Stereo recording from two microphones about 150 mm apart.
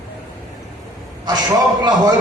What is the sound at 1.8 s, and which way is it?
Speech, 30° right (ahead or behind).